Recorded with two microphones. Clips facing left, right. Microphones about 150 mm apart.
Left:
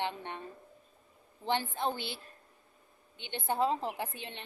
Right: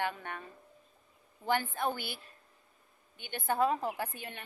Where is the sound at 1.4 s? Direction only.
25° left (ahead or behind).